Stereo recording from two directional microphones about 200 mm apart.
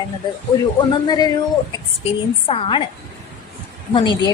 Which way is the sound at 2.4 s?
25° left (ahead or behind).